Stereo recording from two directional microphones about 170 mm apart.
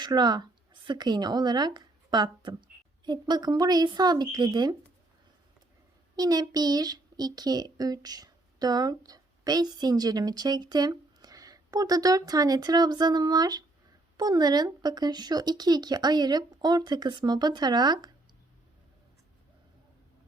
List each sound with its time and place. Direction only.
0.0 s speech: 25° right (ahead or behind)
6.1 s speech: 20° right (ahead or behind)